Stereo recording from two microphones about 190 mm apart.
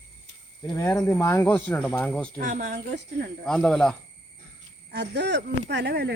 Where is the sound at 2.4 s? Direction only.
40° right (ahead or behind).